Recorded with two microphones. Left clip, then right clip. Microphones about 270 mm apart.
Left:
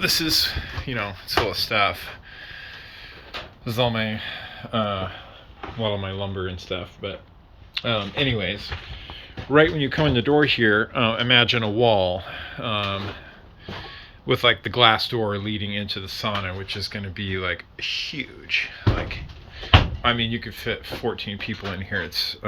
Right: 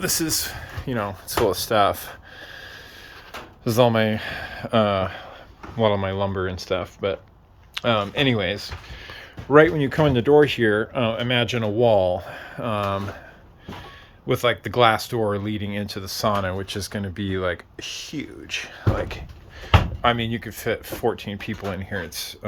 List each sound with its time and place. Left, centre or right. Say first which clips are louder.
0.0 s speech: left 4 dB; centre
3.6 s speech: right 5 dB; right
14.3 s speech: left 2 dB; centre
20.0 s speech: right 1 dB; centre